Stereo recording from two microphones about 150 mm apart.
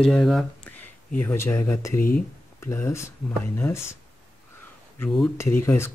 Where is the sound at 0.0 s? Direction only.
Centre (ahead or behind).